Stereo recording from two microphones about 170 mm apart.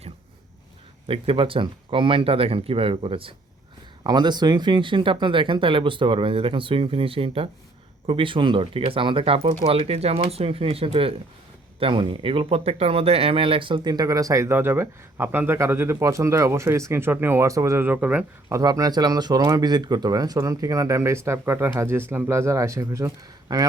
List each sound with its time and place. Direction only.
1.0 s speech: 30° right (ahead or behind); by 18.5 s 10° right (ahead or behind)
18.5 s speech: 20° right (ahead or behind)